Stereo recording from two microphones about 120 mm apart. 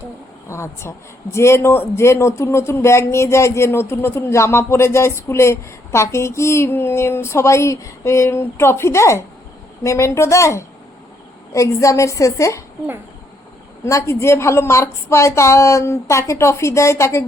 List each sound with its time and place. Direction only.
0.4 s speech: 25° left (ahead or behind)
13.8 s speech: 25° left (ahead or behind)